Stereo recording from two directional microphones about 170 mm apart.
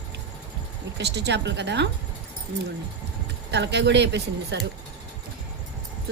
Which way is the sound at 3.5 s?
90° right.